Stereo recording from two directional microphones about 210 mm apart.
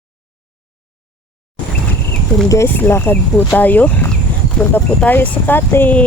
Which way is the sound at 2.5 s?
10° left (ahead or behind).